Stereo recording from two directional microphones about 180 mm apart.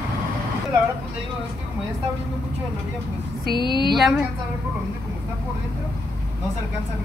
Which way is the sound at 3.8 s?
Centre (ahead or behind).